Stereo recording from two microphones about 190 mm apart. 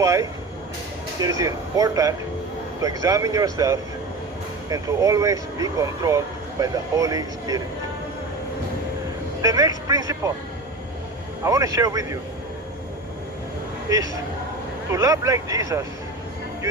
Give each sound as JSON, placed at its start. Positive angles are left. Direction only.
{"t": 0.0, "sound": "speech", "side_deg": -15}
{"t": 9.4, "sound": "speech", "side_deg": -20}
{"t": 11.4, "sound": "speech", "side_deg": -15}
{"t": 14.9, "sound": "speech", "side_deg": -15}